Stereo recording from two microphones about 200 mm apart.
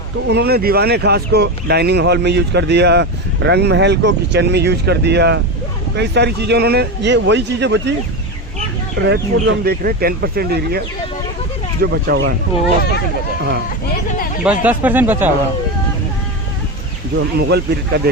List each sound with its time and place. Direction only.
0.3 s speech: 55° right (ahead or behind)
9.0 s speech: 60° right (ahead or behind)
14.1 s a sound: 40° left (ahead or behind)
14.4 s speech: 10° right (ahead or behind)
17.3 s speech: 55° right (ahead or behind)